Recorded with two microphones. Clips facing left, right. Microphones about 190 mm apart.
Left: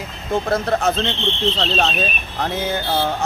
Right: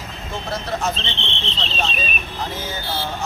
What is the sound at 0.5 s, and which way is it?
Speech, 55° left (ahead or behind).